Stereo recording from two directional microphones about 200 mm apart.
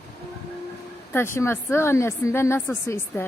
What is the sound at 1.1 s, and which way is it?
Speech, 10° left (ahead or behind).